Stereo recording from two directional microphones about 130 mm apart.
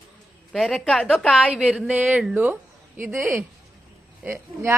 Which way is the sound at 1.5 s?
5° right (ahead or behind).